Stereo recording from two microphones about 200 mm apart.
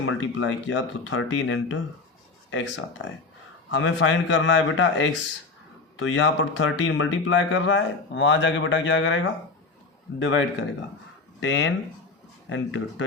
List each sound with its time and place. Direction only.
0.0 s speech: 70° left (ahead or behind)